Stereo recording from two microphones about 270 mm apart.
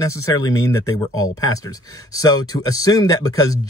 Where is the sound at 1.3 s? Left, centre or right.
Left.